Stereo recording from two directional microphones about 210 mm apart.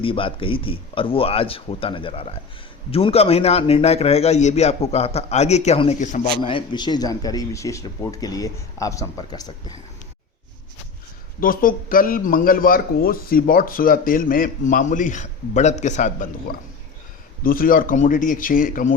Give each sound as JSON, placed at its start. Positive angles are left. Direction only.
{"t": 0.0, "sound": "a man's voice", "side_deg": 25}
{"t": 6.5, "sound": "speech", "side_deg": 20}
{"t": 11.3, "sound": "a man's voice", "side_deg": 40}